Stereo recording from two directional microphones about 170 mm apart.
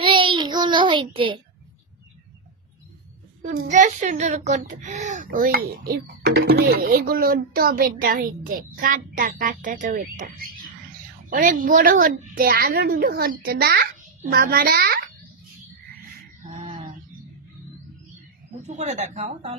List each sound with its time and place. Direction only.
0.0 s child singing: 30° right (ahead or behind)
3.4 s a child's voice: 45° right (ahead or behind); by 15.0 s 65° right (ahead or behind)
18.6 s speech: 40° right (ahead or behind)